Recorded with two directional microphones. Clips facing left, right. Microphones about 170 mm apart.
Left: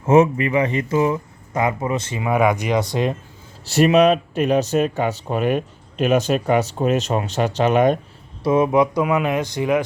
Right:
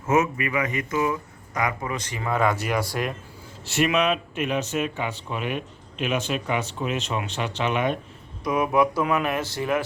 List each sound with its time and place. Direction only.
0.0 s speech: 30° left (ahead or behind)
2.2 s speech: 15° left (ahead or behind)
3.6 s speech: 35° left (ahead or behind)
8.4 s speech: 25° left (ahead or behind)